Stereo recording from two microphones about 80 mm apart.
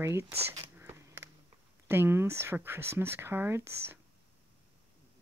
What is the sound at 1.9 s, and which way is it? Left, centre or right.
Speech, right.